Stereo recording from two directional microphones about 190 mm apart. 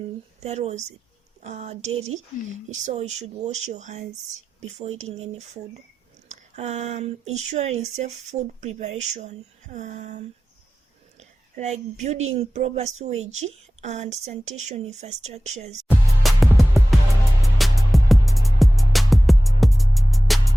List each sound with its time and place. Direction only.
0.3 s a woman's voice: 35° right (ahead or behind)
15.9 s music: centre (ahead or behind)